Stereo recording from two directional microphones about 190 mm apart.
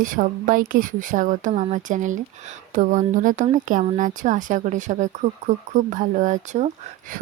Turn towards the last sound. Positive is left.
turn(degrees=-40)  # may be behind; listen again after turning